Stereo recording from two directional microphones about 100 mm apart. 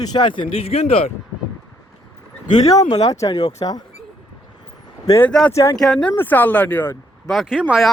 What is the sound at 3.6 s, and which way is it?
Speech, 55° left (ahead or behind).